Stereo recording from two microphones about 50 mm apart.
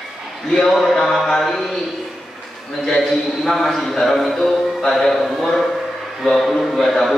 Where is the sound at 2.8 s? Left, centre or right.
Centre.